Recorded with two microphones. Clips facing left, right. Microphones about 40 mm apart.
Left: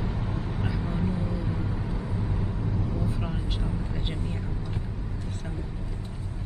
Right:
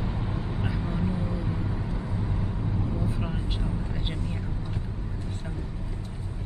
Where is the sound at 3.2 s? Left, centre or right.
Centre.